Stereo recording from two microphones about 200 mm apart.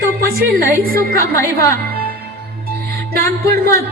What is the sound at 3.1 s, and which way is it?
Speech, 50° right (ahead or behind).